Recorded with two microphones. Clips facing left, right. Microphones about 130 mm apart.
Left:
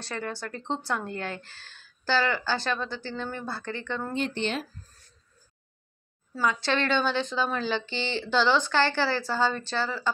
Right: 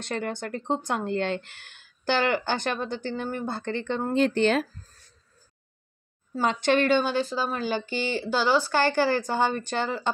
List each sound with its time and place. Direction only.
0.0 s speech: 20° right (ahead or behind)
4.1 s speech: 45° right (ahead or behind)
6.4 s speech: 25° right (ahead or behind)
6.8 s speech: 10° right (ahead or behind)
7.5 s speech: 45° right (ahead or behind)
7.8 s speech: 10° right (ahead or behind)